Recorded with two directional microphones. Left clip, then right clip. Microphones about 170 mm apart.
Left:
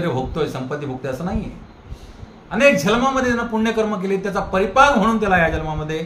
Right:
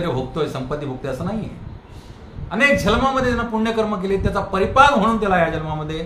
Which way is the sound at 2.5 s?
Centre (ahead or behind).